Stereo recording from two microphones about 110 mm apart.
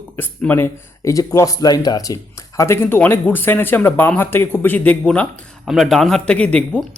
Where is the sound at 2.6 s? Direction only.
20° left (ahead or behind).